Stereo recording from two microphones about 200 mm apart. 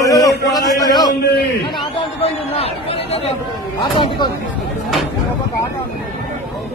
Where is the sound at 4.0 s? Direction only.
25° left (ahead or behind).